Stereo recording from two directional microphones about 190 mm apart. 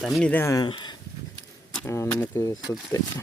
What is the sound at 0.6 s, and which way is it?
Speech, 25° left (ahead or behind).